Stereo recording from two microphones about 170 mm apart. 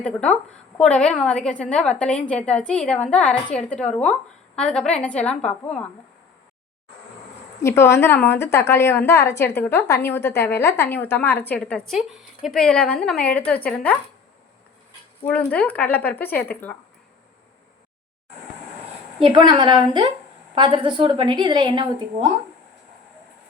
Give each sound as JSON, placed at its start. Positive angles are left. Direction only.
{"t": 0.0, "sound": "a woman's voice", "side_deg": 5}
{"t": 7.6, "sound": "a woman's voice", "side_deg": 15}
{"t": 15.2, "sound": "a woman's voice", "side_deg": 5}
{"t": 19.2, "sound": "a woman's voice", "side_deg": -25}